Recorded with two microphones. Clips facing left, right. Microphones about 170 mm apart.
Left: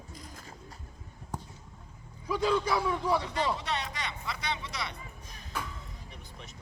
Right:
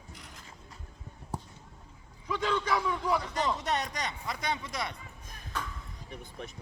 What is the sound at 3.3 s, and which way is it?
Speech, 45° right (ahead or behind).